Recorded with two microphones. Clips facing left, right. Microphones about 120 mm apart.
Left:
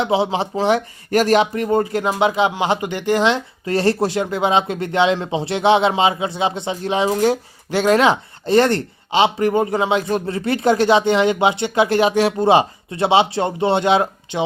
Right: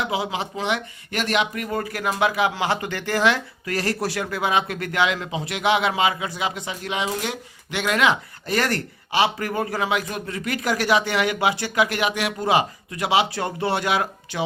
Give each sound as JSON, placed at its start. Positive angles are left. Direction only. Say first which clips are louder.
{"t": 0.0, "sound": "speech", "louder": "left 7 dB", "side_deg": 30}